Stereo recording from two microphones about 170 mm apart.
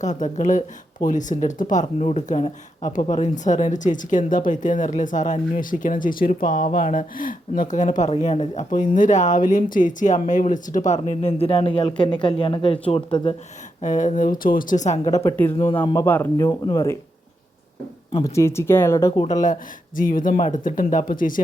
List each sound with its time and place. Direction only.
0.0 s speech: 45° left (ahead or behind)
13.8 s speech: 45° left (ahead or behind)
15.0 s speech: 20° left (ahead or behind)
16.0 s speech: 10° left (ahead or behind)
18.2 s speech: 15° left (ahead or behind)
19.3 s speech: 50° left (ahead or behind)